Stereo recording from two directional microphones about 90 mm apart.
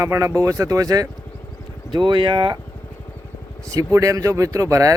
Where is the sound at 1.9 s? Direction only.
65° right (ahead or behind).